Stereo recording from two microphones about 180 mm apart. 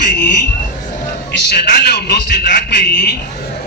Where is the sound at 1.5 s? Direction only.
65° left (ahead or behind).